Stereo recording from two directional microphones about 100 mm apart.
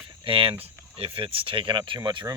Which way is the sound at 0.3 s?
65° right (ahead or behind).